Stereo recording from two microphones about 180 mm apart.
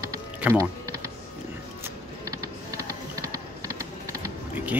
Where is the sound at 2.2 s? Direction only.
20° right (ahead or behind).